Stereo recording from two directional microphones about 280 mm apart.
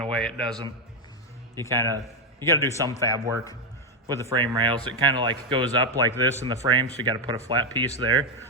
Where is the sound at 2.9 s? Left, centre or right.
Centre.